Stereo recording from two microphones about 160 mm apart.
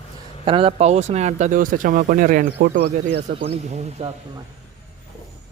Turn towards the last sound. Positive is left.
turn(degrees=-40)  # may be behind; listen again after turning